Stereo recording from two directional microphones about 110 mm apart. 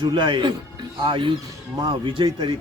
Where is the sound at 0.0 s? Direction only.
45° right (ahead or behind).